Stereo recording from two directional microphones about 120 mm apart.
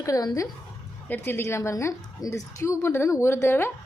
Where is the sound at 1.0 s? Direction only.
15° left (ahead or behind).